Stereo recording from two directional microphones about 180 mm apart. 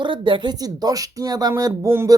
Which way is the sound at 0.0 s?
25° right (ahead or behind).